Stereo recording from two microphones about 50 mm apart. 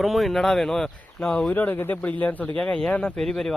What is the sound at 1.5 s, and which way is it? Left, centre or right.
Speech, left.